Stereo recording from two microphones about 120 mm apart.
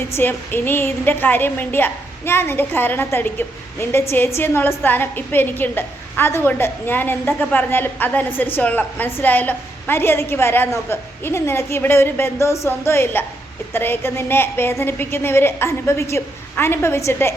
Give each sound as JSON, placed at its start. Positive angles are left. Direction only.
{"t": 0.1, "sound": "a woman's voice", "side_deg": 15}